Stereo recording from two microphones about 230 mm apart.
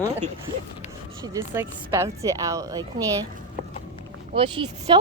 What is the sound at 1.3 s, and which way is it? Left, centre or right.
Speech, centre.